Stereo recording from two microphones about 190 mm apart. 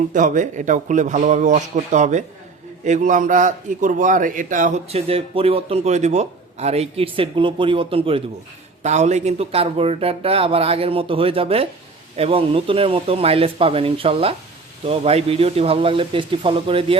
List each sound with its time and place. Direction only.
0.1 s a man's voice: 40° right (ahead or behind)